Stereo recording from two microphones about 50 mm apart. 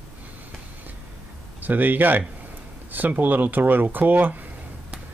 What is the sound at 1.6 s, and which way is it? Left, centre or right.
Speech, right.